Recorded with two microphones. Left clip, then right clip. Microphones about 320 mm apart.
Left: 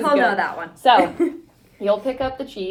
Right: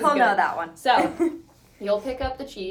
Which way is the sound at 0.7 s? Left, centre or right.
Centre.